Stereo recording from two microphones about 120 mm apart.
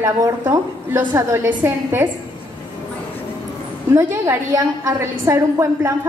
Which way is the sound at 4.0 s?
20° right (ahead or behind).